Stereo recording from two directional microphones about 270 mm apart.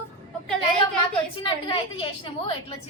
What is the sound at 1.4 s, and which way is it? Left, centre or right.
A woman's voice, centre.